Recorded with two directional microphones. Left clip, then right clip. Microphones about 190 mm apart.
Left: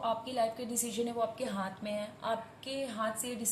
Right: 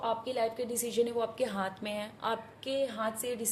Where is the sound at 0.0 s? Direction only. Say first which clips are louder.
Right 1 dB; 45° right (ahead or behind).